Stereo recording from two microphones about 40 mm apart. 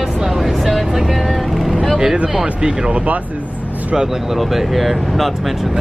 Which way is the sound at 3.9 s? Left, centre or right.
Centre.